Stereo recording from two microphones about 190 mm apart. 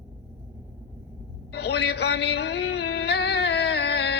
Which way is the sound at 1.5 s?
60° left (ahead or behind).